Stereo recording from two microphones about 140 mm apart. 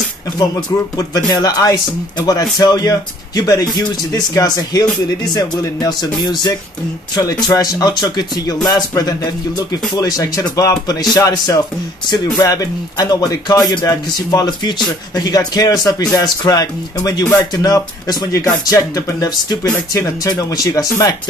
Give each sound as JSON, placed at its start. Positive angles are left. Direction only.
{"t": 0.4, "sound": "speech", "side_deg": 30}